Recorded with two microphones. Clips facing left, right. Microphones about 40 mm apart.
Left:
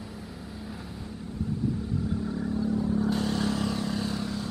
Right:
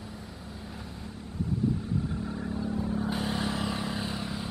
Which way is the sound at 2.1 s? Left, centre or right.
Centre.